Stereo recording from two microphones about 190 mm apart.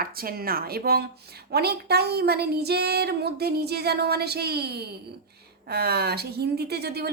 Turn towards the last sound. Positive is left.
turn(degrees=-55)  # may be behind; listen again after turning